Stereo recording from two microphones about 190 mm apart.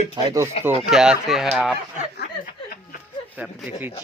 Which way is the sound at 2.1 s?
55° left (ahead or behind).